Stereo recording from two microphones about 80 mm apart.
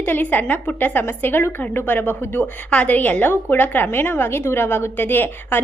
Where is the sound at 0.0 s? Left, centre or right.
Left.